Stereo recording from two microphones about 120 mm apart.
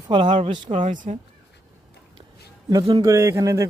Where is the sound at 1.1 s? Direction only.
60° right (ahead or behind).